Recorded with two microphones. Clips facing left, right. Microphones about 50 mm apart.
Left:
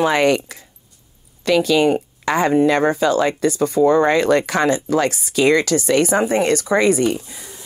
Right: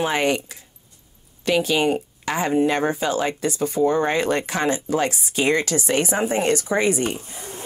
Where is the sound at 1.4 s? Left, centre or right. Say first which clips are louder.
Left 5 dB; right.